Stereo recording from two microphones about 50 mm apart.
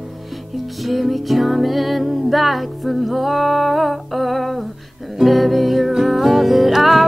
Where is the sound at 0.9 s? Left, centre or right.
Centre.